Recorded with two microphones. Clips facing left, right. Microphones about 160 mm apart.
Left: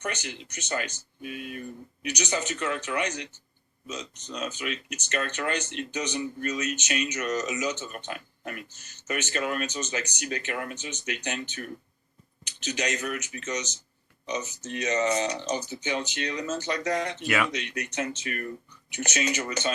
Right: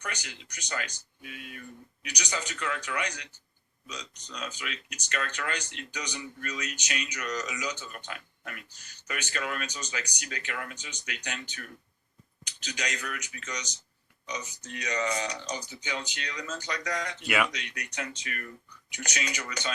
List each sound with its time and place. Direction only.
0.0 s speech: 25° left (ahead or behind)
4.3 s speech: 25° left (ahead or behind)
12.6 s speech: 25° left (ahead or behind)
17.2 s speech: 15° right (ahead or behind)
17.5 s speech: 25° left (ahead or behind)